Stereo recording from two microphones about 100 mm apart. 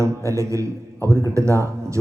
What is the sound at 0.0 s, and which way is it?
Speech, 30° right (ahead or behind).